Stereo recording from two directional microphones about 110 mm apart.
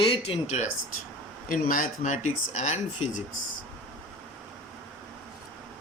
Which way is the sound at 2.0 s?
90° left.